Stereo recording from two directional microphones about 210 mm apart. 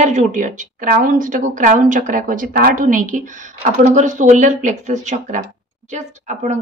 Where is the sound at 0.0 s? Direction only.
35° right (ahead or behind).